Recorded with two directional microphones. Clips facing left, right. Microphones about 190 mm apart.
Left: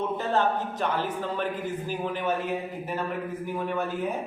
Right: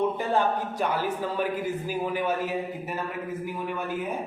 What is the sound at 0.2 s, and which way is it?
A man's voice, 10° right (ahead or behind).